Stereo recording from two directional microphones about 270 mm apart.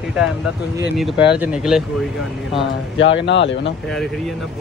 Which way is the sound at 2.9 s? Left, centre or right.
Left.